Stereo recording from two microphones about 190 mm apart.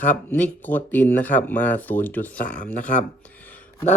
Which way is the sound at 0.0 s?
10° left (ahead or behind).